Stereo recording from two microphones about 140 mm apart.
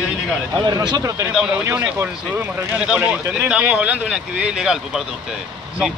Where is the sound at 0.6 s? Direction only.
30° right (ahead or behind); by 5.0 s 5° right (ahead or behind).